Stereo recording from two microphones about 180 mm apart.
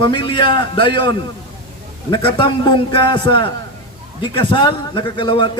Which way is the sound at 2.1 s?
25° left (ahead or behind).